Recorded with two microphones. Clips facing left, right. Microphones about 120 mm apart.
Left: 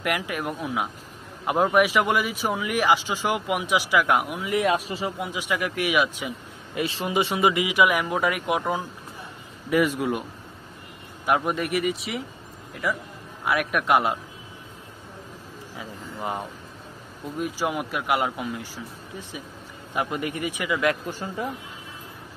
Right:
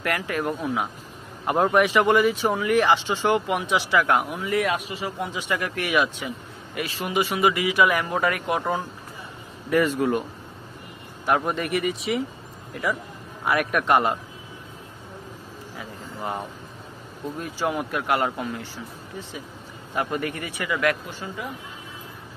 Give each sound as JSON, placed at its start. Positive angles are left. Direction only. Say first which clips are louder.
{"t": 0.0, "sound": "speech", "louder": "right 1 dB", "side_deg": 15}
{"t": 4.7, "sound": "speech", "louder": "left 3 dB", "side_deg": 35}
{"t": 5.2, "sound": "speech", "louder": "right 3 dB", "side_deg": 10}
{"t": 6.7, "sound": "speech", "louder": "left 1 dB", "side_deg": 25}
{"t": 11.2, "sound": "speech", "louder": "even", "side_deg": 5}
{"t": 15.8, "sound": "speech", "louder": "even", "side_deg": 15}
{"t": 19.9, "sound": "speech", "louder": "right 1 dB", "side_deg": 15}
{"t": 21.1, "sound": "speech", "louder": "left 3 dB", "side_deg": 45}